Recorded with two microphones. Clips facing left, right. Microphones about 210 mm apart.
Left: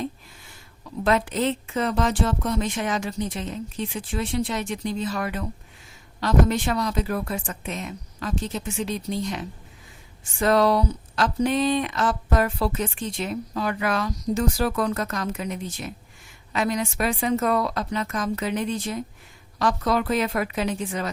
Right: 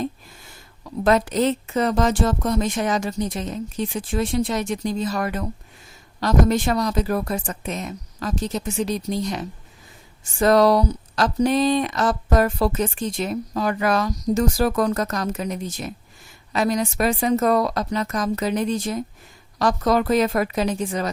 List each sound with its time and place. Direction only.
1.0 s speech: 40° right (ahead or behind)